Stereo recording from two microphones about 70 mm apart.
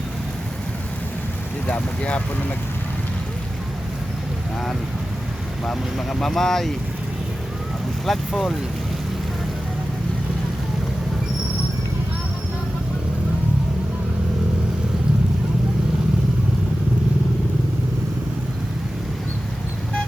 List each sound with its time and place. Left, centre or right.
1.6 s speech: centre
5.6 s speech: centre
8.0 s speech: centre